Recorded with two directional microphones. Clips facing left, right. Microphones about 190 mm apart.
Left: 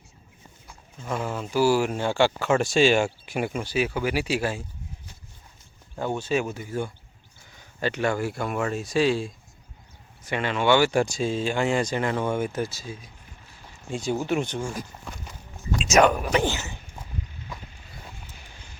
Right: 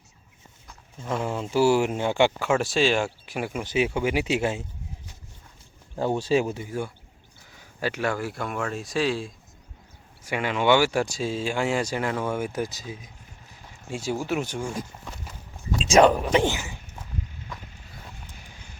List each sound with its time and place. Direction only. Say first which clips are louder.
1.2 s speech: right 1 dB; 25° right (ahead or behind)
2.5 s speech: left 2 dB; centre (ahead or behind)
3.6 s speech: right 5 dB; 20° right (ahead or behind)
6.0 s speech: right 3 dB; 35° right (ahead or behind)
6.7 s speech: left 1 dB; 10° right (ahead or behind)
10.2 s speech: even; 10° right (ahead or behind)
13.9 s speech: left 2 dB; 5° right (ahead or behind)
15.8 s speech: right 2 dB; 30° right (ahead or behind)
16.3 s a sound: right 2 dB; 20° right (ahead or behind)